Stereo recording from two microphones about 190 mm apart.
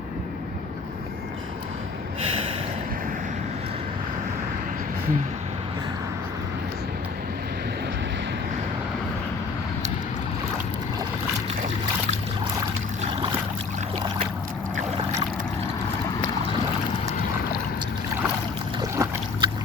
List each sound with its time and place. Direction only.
18.8 s boat: 20° right (ahead or behind)